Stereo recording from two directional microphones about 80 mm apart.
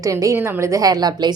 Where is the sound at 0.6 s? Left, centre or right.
Right.